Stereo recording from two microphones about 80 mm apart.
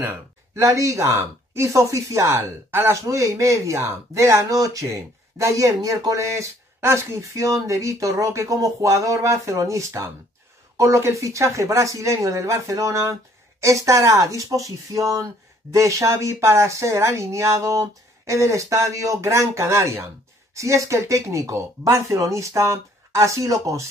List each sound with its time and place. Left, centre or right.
0.6 s speech: right
2.7 s speech: right
3.1 s speech: right
4.6 s speech: right